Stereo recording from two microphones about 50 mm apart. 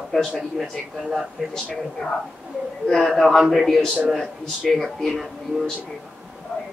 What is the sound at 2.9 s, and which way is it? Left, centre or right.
Speech, centre.